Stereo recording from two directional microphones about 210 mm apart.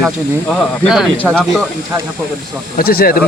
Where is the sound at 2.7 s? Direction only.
45° left (ahead or behind).